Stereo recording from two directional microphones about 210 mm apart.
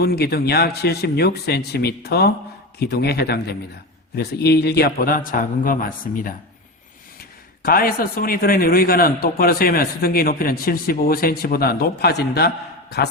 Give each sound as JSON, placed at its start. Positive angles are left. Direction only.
{"t": 0.0, "sound": "a man's voice", "side_deg": 50}